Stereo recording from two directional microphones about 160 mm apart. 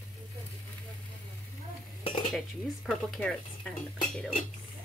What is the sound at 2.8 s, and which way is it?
Speech, 5° left (ahead or behind).